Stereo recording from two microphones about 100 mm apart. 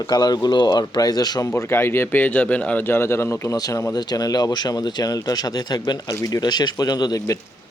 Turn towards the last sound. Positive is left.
turn(degrees=40)  # may be behind; listen again after turning